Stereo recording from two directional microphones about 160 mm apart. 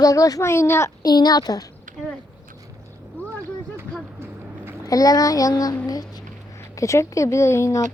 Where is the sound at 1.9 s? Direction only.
55° right (ahead or behind).